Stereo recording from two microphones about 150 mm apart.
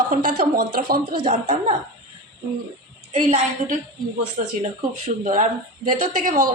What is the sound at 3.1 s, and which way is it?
Speech, 55° right (ahead or behind).